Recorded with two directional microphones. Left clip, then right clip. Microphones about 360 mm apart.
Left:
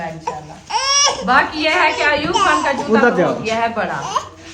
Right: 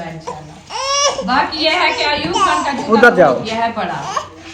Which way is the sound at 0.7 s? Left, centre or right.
Centre.